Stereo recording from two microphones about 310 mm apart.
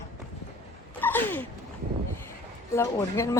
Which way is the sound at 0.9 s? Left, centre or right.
Centre.